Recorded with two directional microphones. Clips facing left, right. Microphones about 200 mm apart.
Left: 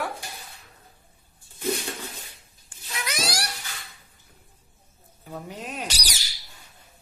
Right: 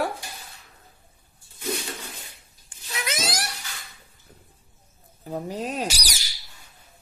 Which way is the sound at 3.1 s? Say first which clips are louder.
Even; 20° right (ahead or behind).